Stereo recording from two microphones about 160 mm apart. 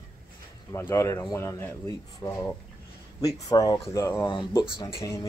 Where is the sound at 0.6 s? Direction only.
15° left (ahead or behind).